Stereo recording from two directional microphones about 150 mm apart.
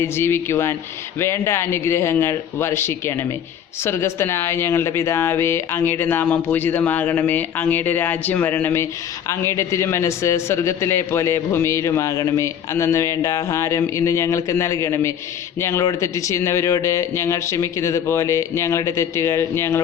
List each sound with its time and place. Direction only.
0.0 s a man's voice: 15° left (ahead or behind)